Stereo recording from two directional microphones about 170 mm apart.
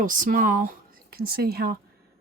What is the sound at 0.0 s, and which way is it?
Speech, 50° right (ahead or behind).